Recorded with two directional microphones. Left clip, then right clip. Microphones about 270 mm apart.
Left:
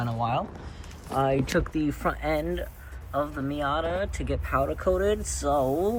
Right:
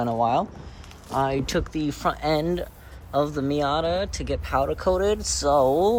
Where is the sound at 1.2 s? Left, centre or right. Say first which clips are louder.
Right 1 dB; centre.